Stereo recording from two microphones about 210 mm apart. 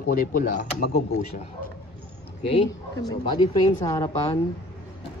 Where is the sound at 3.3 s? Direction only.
20° left (ahead or behind).